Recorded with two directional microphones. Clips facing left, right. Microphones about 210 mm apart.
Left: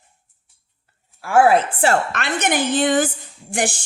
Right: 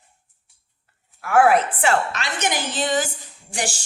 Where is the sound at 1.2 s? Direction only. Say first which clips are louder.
Left 2 dB; 30° left (ahead or behind).